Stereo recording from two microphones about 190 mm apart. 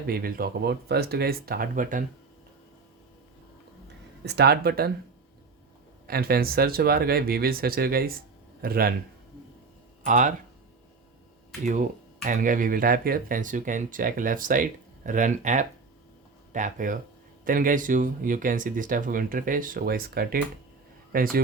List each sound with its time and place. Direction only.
0.1 s speech: 50° right (ahead or behind)
4.3 s speech: 60° right (ahead or behind)
6.1 s speech: 55° right (ahead or behind)
10.1 s speech: 40° right (ahead or behind)
12.2 s speech: 45° right (ahead or behind)